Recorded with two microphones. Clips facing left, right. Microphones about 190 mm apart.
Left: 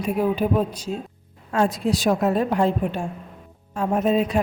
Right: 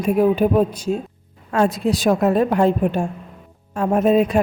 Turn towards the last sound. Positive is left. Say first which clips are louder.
# right 5 dB
turn(degrees=-55)  # may be behind; listen again after turning